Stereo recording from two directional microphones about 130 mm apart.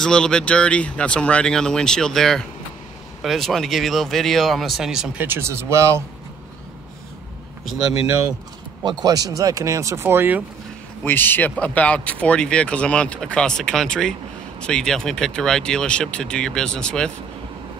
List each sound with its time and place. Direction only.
0.0 s speech: 5° left (ahead or behind); by 6.0 s 20° right (ahead or behind)
8.8 s speech: 30° right (ahead or behind)
11.1 s speech: 15° left (ahead or behind)